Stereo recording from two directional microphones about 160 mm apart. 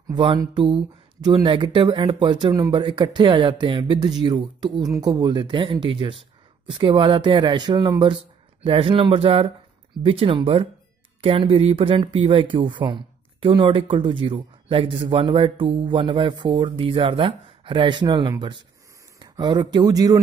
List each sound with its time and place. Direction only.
0.1 s speech: 30° right (ahead or behind)